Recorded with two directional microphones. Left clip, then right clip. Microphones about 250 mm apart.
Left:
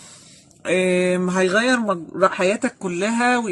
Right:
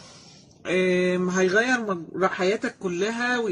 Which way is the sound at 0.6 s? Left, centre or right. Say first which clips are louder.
Left 4 dB; left.